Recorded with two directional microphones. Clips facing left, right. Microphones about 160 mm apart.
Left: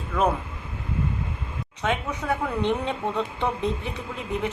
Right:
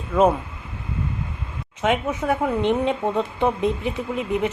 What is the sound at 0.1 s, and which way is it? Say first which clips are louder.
Speech: right 6 dB; 20° right (ahead or behind).